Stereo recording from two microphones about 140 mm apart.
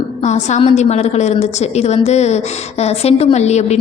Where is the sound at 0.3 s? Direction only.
55° left (ahead or behind).